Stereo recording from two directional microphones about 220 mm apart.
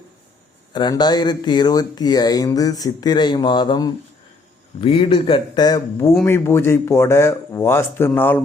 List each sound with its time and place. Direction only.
0.7 s speech: 20° left (ahead or behind)